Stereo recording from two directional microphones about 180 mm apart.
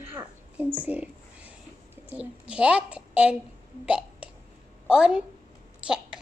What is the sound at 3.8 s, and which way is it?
Hiccup, 5° right (ahead or behind).